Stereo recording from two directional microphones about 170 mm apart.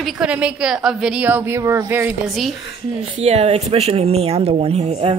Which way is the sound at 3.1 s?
40° right (ahead or behind).